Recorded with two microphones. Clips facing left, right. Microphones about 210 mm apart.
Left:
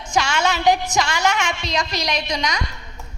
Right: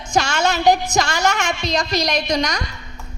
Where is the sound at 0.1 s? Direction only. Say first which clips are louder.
Right 2 dB; 40° right (ahead or behind).